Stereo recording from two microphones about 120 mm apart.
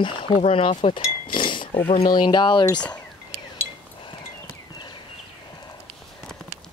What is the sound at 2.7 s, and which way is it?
Speech, 10° left (ahead or behind).